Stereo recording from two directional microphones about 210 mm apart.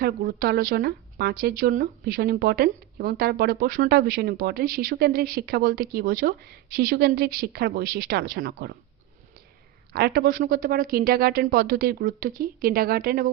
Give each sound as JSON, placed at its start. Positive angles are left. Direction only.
{"t": 0.0, "sound": "speech", "side_deg": -45}
{"t": 9.9, "sound": "speech", "side_deg": -50}